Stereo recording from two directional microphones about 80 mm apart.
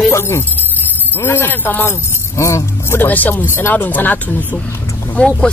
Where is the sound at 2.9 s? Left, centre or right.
Left.